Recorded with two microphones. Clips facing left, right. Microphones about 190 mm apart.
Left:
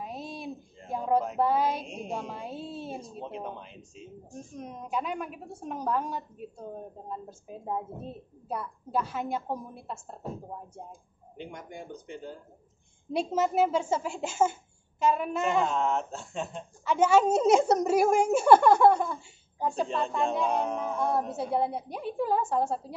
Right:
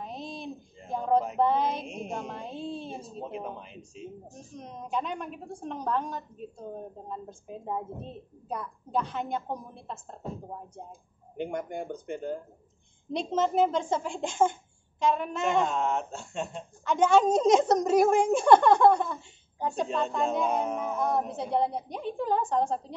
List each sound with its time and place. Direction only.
0.0 s a woman's voice: 5° left (ahead or behind)
11.3 s speech: 55° right (ahead or behind)
13.1 s a woman's voice: 10° left (ahead or behind)